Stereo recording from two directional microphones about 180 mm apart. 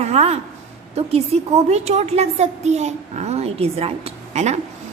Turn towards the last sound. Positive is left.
turn(degrees=-40)  # may be behind; listen again after turning